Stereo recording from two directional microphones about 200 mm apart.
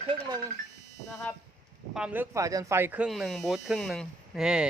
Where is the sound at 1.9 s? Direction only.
5° right (ahead or behind).